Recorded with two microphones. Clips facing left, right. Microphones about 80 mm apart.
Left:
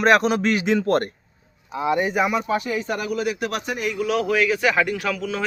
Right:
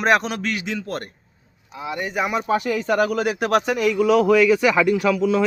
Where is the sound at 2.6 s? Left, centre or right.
Right.